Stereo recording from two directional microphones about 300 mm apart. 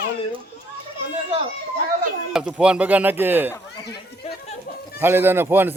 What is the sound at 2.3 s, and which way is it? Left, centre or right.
Speech, centre.